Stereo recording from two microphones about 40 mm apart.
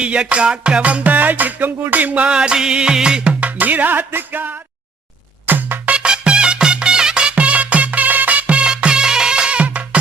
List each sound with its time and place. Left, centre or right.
0.0 s music: right
3.2 s music: right
5.8 s music: right
6.1 s music: right